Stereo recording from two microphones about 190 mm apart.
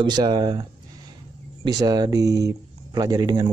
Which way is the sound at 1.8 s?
20° right (ahead or behind).